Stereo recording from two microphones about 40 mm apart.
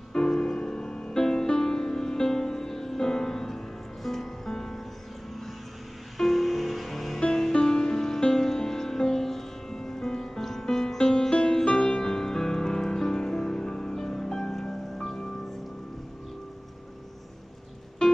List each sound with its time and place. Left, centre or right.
0.1 s music: centre
6.1 s music: centre
7.5 s music: centre
18.0 s music: left